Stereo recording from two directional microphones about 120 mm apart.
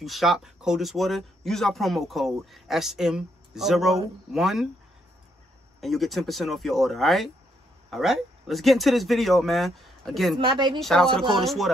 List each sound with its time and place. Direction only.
0.0 s speech: centre (ahead or behind)
5.8 s speech: centre (ahead or behind)
10.3 s speech: 40° right (ahead or behind)
10.8 s speech: 5° left (ahead or behind)